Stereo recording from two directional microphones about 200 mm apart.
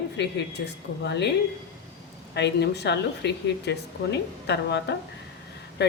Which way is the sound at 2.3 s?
55° left (ahead or behind).